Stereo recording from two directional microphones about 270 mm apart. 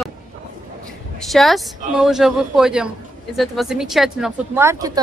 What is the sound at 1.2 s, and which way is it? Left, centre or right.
A woman's voice, centre.